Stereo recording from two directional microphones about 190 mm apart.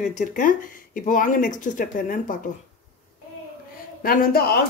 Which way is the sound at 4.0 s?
50° left (ahead or behind).